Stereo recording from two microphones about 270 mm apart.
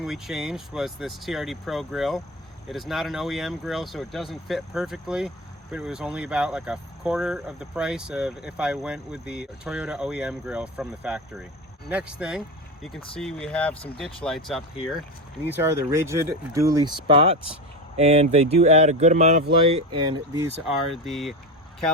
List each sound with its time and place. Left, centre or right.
0.0 s speech: centre
15.5 s speech: centre
20.0 s speech: centre
20.7 s speech: centre